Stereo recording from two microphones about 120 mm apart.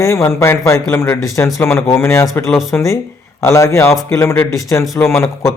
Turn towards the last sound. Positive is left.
turn(degrees=20)  # may be behind; listen again after turning